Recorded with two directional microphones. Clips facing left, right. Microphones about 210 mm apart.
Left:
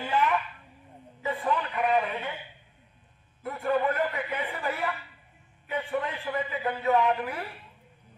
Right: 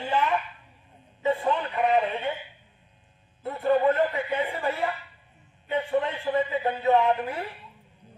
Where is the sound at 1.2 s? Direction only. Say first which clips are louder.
Right 4 dB; 25° right (ahead or behind).